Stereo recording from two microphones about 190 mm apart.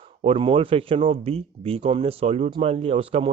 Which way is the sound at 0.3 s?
25° right (ahead or behind).